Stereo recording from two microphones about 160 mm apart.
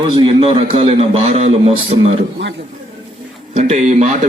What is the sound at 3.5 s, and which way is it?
Speech, 45° right (ahead or behind).